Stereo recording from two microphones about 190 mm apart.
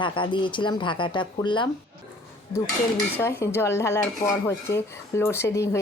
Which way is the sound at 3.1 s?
15° left (ahead or behind).